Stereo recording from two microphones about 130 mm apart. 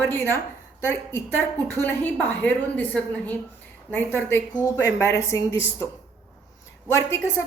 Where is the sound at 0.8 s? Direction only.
20° left (ahead or behind).